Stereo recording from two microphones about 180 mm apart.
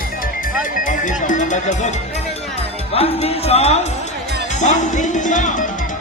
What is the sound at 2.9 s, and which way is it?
Speech, 35° left (ahead or behind).